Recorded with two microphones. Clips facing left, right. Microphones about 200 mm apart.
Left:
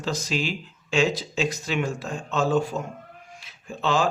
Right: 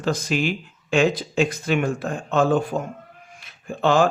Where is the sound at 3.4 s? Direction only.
55° right (ahead or behind).